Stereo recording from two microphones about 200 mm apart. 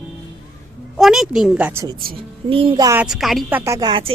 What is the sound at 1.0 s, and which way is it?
Speech, centre (ahead or behind).